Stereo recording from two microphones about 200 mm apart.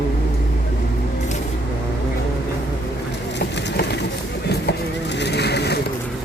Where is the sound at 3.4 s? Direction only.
55° left (ahead or behind).